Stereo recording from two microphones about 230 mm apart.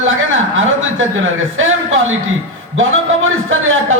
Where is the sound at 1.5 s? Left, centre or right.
Right.